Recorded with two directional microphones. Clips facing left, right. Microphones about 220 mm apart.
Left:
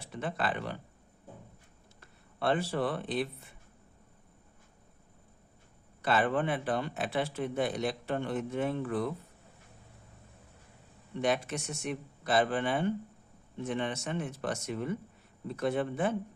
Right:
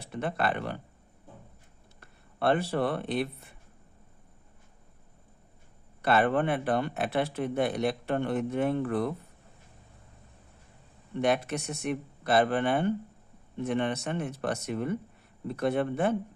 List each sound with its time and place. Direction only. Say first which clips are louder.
0.0 s speech: right 4 dB; 60° right (ahead or behind)
2.0 s speech: right 4 dB; 60° right (ahead or behind)
6.0 s speech: right 4 dB; 60° right (ahead or behind)
11.2 s speech: right 3 dB; 60° right (ahead or behind)